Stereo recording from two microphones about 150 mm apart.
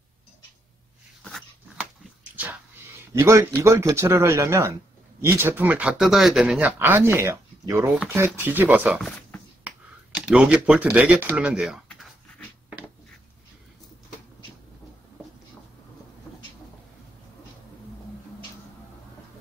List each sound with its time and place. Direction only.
1.8 s dog: 10° right (ahead or behind)
3.1 s speech: 20° right (ahead or behind); by 12.1 s centre (ahead or behind)